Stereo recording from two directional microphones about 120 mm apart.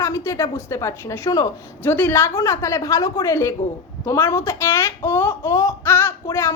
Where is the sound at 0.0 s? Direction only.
25° left (ahead or behind).